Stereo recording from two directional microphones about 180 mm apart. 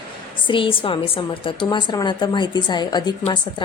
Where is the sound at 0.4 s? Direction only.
30° left (ahead or behind).